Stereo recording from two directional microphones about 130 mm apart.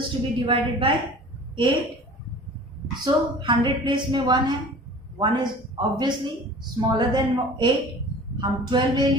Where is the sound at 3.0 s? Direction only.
35° right (ahead or behind).